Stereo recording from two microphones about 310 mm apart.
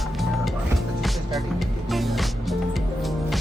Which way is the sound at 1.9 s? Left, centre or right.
Centre.